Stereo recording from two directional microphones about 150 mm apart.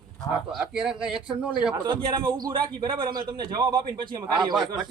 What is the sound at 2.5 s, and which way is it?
A man's voice, 35° right (ahead or behind).